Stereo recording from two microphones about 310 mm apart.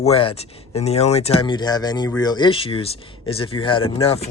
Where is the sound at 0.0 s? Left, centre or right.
Centre.